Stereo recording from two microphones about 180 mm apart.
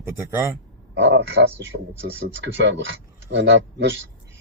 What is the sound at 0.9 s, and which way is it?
Speech, 80° right.